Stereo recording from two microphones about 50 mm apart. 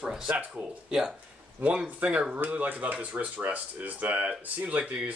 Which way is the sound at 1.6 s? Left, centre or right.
Right.